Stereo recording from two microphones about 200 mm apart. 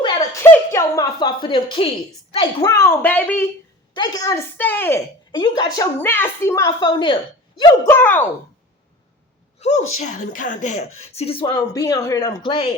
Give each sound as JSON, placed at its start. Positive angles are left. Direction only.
{"t": 0.0, "sound": "a woman's voice", "side_deg": 20}
{"t": 2.6, "sound": "a woman's voice", "side_deg": 15}
{"t": 3.9, "sound": "a woman's voice", "side_deg": 20}
{"t": 5.3, "sound": "a woman's voice", "side_deg": 20}
{"t": 7.6, "sound": "a woman's voice", "side_deg": 10}
{"t": 9.6, "sound": "a woman's voice", "side_deg": 35}